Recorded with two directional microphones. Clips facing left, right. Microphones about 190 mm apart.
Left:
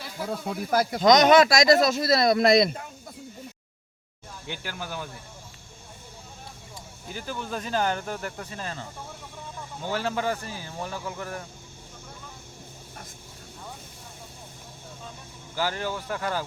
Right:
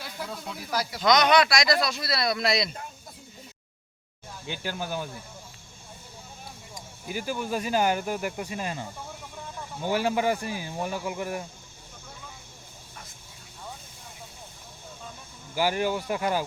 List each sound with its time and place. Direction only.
0.3 s speech: 50° left (ahead or behind)
4.4 s speech: 15° right (ahead or behind)
6.7 s speech: 10° right (ahead or behind)
15.5 s speech: 15° right (ahead or behind)